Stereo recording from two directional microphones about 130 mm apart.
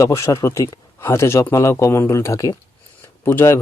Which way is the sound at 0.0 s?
25° left (ahead or behind).